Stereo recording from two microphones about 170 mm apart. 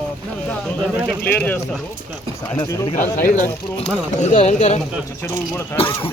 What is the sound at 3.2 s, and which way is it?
Speech, 50° left (ahead or behind).